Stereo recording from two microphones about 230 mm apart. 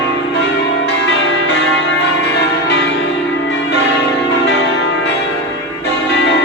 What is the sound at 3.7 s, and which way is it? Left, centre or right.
Change ringing, left.